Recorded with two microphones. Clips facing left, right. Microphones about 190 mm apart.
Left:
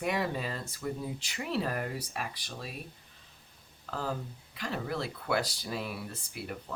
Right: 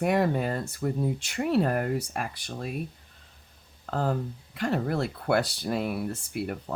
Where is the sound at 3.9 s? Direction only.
55° right (ahead or behind).